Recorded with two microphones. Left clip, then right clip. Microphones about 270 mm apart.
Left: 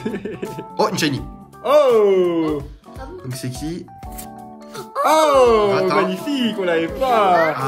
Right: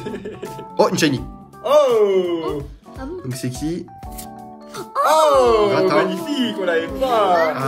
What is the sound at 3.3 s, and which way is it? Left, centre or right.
Speech, centre.